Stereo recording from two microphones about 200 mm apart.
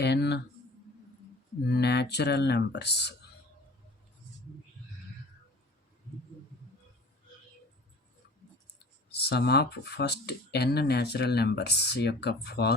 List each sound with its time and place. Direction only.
0.0 s speech: 55° left (ahead or behind)
1.7 s speech: 55° left (ahead or behind)
9.1 s speech: 55° left (ahead or behind)